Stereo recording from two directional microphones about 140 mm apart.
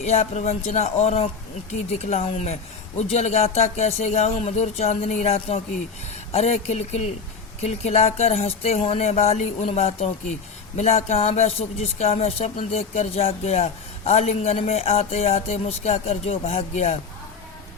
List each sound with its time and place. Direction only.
0.0 s a man's voice: 50° left (ahead or behind)